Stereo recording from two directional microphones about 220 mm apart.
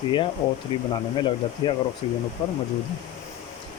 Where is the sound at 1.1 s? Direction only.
20° left (ahead or behind).